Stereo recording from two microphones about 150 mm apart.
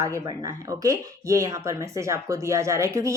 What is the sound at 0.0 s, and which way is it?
Speech, 20° right (ahead or behind).